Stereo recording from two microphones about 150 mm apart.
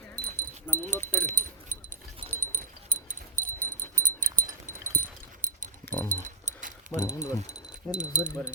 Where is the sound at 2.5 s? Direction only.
60° right (ahead or behind).